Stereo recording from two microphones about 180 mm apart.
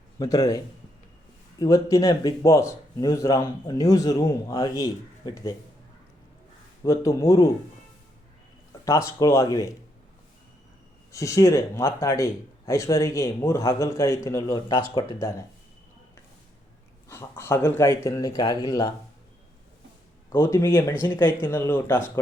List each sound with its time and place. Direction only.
0.2 s a man's voice: 20° left (ahead or behind)
6.8 s speech: 15° left (ahead or behind)
8.8 s speech: 20° left (ahead or behind)
11.1 s speech: 15° left (ahead or behind)
17.1 s speech: 15° left (ahead or behind)
20.3 s speech: 15° left (ahead or behind)